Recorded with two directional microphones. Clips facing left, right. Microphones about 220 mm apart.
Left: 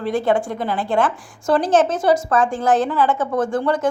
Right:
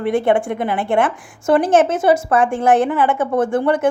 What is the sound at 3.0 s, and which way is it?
Speech, 55° right (ahead or behind).